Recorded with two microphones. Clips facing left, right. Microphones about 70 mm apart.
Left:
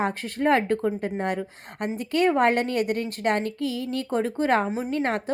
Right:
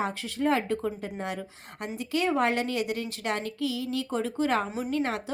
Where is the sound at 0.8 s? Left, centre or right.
Left.